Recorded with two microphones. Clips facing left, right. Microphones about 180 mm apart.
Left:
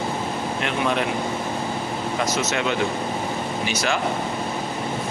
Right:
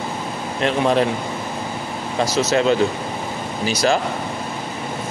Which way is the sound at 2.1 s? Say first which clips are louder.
Right 7 dB; 35° right (ahead or behind).